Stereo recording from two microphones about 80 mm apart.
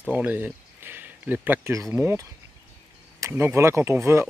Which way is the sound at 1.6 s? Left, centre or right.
Right.